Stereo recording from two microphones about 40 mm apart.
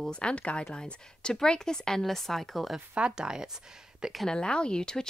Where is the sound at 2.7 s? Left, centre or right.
Right.